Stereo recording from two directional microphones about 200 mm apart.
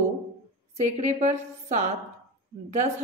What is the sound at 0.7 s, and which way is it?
A woman's voice, 35° right (ahead or behind).